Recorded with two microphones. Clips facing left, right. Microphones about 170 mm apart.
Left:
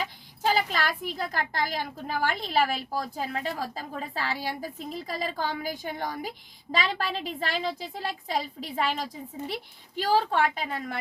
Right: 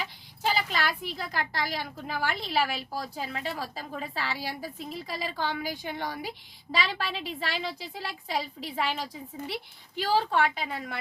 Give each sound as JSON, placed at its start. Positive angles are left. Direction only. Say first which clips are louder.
{"t": 0.0, "sound": "a woman's voice", "louder": "left 3 dB", "side_deg": 45}